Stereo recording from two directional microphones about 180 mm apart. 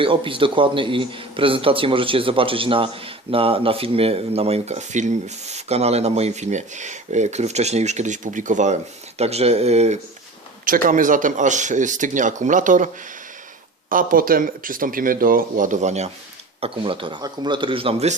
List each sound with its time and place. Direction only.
0.0 s a man's voice: 30° right (ahead or behind)
10.7 s speech: 50° right (ahead or behind)
13.9 s a man's voice: 50° right (ahead or behind); by 18.1 s 30° right (ahead or behind)